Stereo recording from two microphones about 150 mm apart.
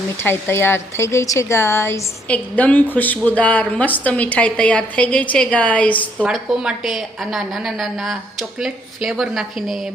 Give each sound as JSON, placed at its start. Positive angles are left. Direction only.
{"t": 0.2, "sound": "a woman's voice", "side_deg": 15}
{"t": 6.2, "sound": "a woman's voice", "side_deg": -5}